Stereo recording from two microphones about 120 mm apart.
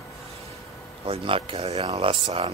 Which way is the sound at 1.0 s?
50° right (ahead or behind).